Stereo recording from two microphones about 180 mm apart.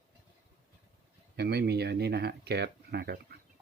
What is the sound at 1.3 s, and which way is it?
Speech, 65° right (ahead or behind).